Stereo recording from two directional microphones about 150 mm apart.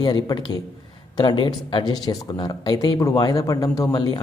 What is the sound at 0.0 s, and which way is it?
Speech, 30° left (ahead or behind).